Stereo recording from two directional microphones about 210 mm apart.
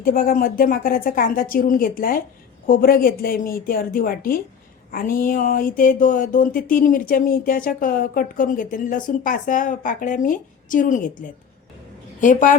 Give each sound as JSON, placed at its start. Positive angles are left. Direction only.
{"t": 0.0, "sound": "a woman's voice", "side_deg": 40}